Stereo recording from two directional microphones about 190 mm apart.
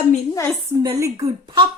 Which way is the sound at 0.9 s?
15° right (ahead or behind).